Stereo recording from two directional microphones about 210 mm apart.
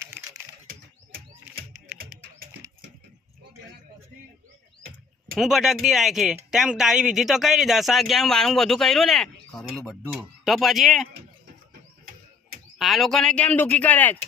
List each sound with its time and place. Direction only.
0.0 s typing: 15° right (ahead or behind)
5.4 s speech: centre (ahead or behind)
12.8 s speech: centre (ahead or behind)